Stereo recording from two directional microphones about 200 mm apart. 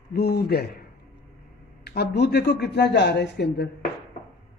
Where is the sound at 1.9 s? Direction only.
55° left (ahead or behind).